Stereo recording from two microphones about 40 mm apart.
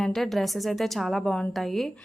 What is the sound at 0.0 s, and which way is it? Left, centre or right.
A woman's voice, centre.